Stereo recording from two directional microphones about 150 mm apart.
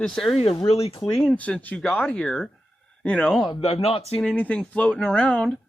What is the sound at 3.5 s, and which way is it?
Speech, 40° left (ahead or behind).